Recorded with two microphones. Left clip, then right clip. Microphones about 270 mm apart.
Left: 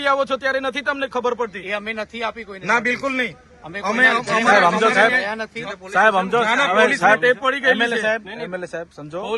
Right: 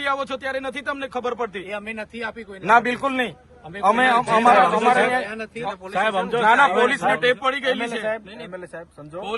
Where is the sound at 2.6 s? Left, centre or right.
Right.